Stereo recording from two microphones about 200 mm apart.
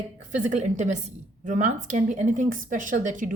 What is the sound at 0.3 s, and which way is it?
Speech, 35° right (ahead or behind).